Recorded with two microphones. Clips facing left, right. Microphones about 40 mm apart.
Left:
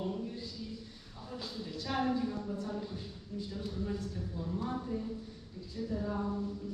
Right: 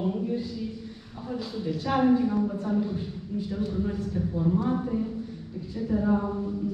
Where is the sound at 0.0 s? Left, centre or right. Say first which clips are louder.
Right 10 dB; right.